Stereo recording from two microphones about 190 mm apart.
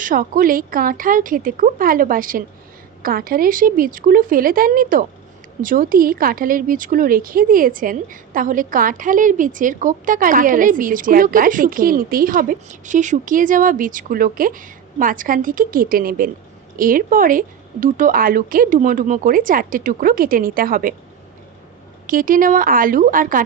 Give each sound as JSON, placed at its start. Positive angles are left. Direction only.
{"t": 0.0, "sound": "speech", "side_deg": -45}
{"t": 22.0, "sound": "speech", "side_deg": -45}